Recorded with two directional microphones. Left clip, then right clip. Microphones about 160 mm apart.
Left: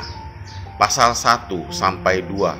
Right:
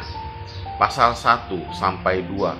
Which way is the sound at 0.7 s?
30° left (ahead or behind).